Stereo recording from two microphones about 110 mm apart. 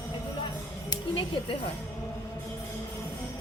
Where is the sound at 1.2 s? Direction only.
50° left (ahead or behind).